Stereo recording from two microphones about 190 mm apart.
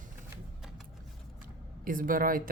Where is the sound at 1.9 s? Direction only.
45° right (ahead or behind).